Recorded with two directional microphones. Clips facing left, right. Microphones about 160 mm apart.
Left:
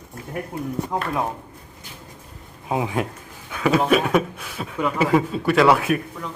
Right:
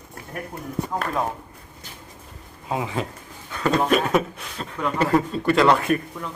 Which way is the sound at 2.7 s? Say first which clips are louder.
Left 3 dB; 15° left (ahead or behind).